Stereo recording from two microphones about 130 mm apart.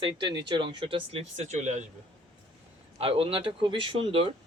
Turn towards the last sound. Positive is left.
turn(degrees=-45)  # may be behind; listen again after turning